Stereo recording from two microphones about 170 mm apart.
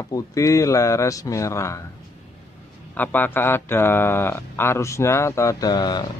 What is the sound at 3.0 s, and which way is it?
A man's voice, 10° left (ahead or behind).